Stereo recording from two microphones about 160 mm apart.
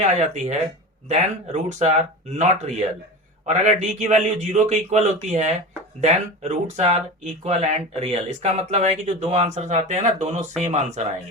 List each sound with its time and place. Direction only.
0.0 s speech: 45° right (ahead or behind)